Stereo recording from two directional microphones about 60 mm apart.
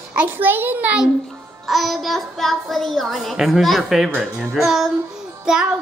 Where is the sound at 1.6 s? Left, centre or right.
Centre.